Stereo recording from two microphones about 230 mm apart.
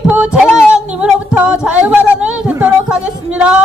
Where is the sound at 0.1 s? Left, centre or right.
Centre.